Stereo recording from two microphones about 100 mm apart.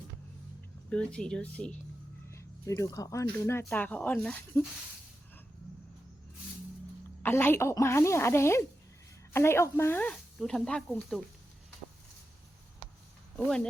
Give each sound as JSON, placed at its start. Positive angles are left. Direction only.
{"t": 0.9, "sound": "speech", "side_deg": 10}
{"t": 2.3, "sound": "a sound", "side_deg": 30}
{"t": 2.9, "sound": "speech", "side_deg": 35}
{"t": 7.2, "sound": "speech", "side_deg": 20}
{"t": 10.0, "sound": "speech", "side_deg": 10}